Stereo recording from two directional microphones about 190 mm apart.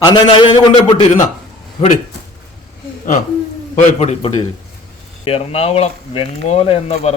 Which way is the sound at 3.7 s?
35° left (ahead or behind).